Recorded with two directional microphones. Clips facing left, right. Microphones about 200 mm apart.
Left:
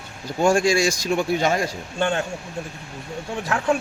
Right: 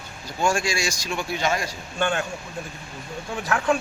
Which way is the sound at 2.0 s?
25° left (ahead or behind).